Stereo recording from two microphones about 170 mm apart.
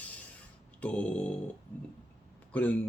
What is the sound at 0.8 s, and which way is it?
Speech, 10° left (ahead or behind).